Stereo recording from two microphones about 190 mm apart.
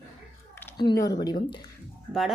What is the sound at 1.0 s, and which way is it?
Speech, 20° left (ahead or behind).